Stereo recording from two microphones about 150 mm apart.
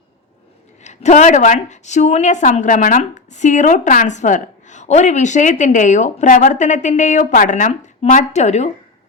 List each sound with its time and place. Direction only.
0.9 s a woman's voice: 50° left (ahead or behind)